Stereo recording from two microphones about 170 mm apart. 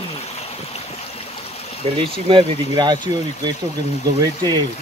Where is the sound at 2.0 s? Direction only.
30° right (ahead or behind).